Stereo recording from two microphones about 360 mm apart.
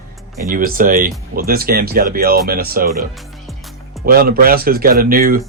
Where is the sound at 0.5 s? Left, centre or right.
Right.